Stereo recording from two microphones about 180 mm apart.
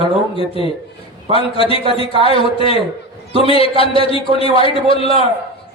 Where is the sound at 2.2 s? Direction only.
30° left (ahead or behind).